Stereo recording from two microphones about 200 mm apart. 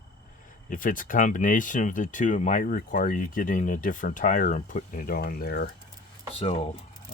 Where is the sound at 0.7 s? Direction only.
40° left (ahead or behind).